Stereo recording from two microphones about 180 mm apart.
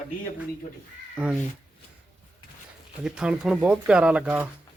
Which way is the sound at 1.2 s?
5° right (ahead or behind).